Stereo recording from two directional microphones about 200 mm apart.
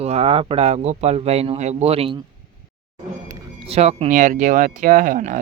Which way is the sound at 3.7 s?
30° right (ahead or behind).